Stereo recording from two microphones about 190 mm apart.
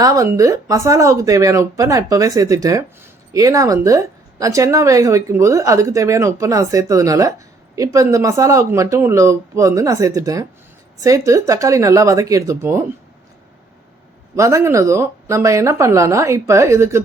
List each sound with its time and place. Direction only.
0.0 s speech: 15° right (ahead or behind)
14.3 s speech: 15° right (ahead or behind)